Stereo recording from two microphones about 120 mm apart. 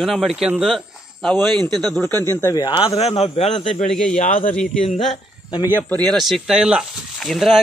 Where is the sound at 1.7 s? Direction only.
Centre (ahead or behind).